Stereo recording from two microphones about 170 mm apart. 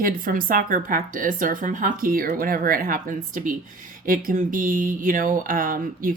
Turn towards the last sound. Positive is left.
turn(degrees=-55)  # may be behind; listen again after turning